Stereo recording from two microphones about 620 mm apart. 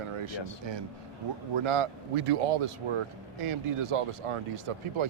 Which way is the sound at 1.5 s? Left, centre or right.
Right.